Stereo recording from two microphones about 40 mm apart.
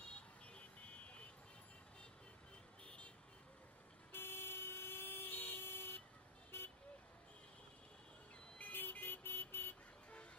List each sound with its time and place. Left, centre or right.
0.5 s vehicle: left
2.8 s vehicle: left
4.1 s vehicle: left
6.5 s vehicle: left
8.6 s vehicle: left
9.0 s vehicle: left